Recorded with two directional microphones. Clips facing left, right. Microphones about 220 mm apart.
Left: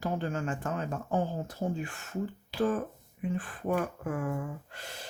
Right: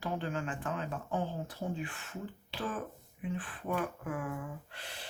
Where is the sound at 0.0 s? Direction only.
45° left (ahead or behind).